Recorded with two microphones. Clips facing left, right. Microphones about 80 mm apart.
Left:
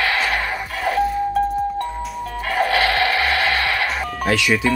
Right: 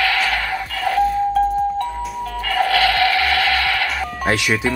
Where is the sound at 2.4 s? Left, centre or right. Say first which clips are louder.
Right 1 dB; left.